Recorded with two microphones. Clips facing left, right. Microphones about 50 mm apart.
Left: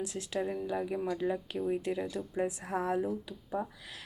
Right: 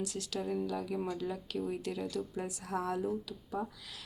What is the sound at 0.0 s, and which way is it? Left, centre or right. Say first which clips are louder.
A woman's voice: left 3 dB; left.